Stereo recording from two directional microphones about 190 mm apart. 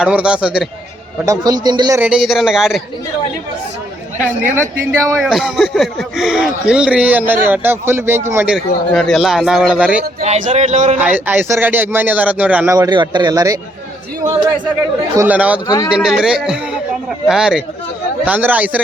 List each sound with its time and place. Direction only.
0.0 s speech: 5° right (ahead or behind)
1.2 s a man's voice: 20° right (ahead or behind)
2.0 s speech: 5° right (ahead or behind)
4.9 s speech: 15° right (ahead or behind)
5.2 s speech: centre (ahead or behind)
8.5 s speech: centre (ahead or behind)
10.2 s speech: 35° right (ahead or behind)
11.0 s speech: 10° right (ahead or behind)
12.7 s a man's voice: 20° right (ahead or behind)
15.1 s speech: 10° right (ahead or behind)
15.6 s speech: 20° left (ahead or behind)
15.9 s speech: 5° right (ahead or behind)